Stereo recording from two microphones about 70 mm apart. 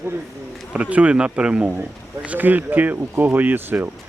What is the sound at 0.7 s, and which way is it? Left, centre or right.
A man's voice, centre.